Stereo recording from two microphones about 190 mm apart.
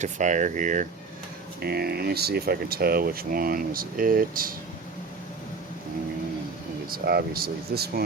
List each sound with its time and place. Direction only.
0.0 s speech: 40° right (ahead or behind)
1.6 s speech: 55° right (ahead or behind)
6.9 s speech: 55° right (ahead or behind)